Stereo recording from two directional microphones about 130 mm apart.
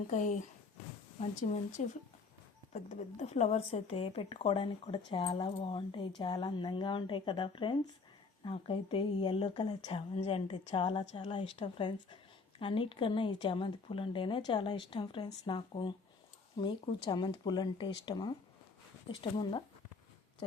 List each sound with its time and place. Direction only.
0.1 s speech: 70° left (ahead or behind)
2.7 s a woman's voice: 60° left (ahead or behind); by 10.0 s 40° left (ahead or behind)
10.2 s a woman's voice: 50° left (ahead or behind)